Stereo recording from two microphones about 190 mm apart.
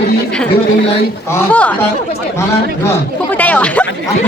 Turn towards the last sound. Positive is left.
turn(degrees=10)  # may be behind; listen again after turning